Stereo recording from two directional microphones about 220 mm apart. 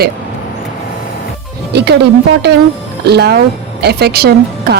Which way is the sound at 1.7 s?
50° right (ahead or behind).